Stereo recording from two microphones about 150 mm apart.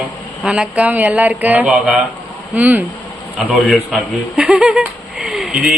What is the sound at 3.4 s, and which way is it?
A man's voice, centre (ahead or behind).